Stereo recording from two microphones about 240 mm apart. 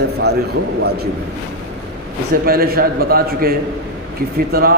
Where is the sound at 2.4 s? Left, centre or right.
Right.